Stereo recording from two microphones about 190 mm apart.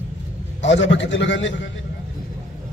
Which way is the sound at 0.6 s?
75° left (ahead or behind).